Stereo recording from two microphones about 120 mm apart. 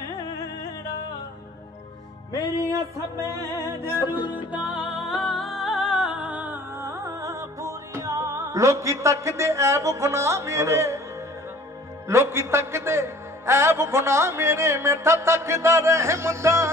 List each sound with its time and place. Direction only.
3.6 s a man's voice: 20° right (ahead or behind)
4.5 s music: 10° right (ahead or behind); by 11.0 s 25° right (ahead or behind)
12.1 s a man's voice: 20° right (ahead or behind)